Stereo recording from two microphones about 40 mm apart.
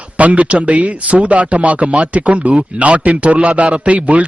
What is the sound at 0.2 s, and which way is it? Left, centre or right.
A man's voice, right.